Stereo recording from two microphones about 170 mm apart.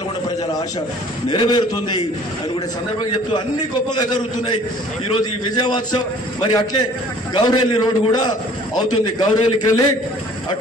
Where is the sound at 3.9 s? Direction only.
25° left (ahead or behind).